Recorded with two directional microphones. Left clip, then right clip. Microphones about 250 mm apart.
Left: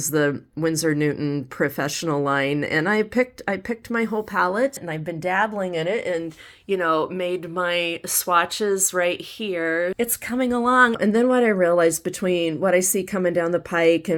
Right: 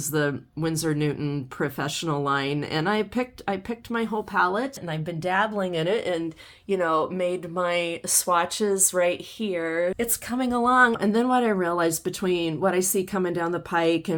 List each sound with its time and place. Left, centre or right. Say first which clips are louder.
0.1 s speech: left 4 dB; centre
4.9 s speech: left 2 dB; centre